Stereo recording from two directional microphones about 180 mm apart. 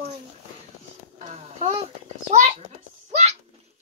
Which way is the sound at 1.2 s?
40° right (ahead or behind).